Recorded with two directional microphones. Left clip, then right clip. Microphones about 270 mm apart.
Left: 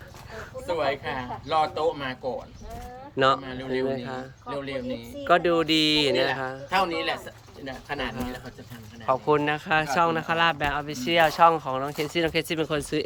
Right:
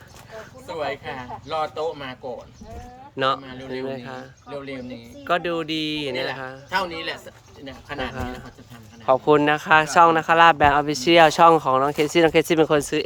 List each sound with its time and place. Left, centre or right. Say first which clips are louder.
0.3 s speech: left 2 dB; centre
3.2 s speech: left 1 dB; centre
9.2 s speech: right 6 dB; right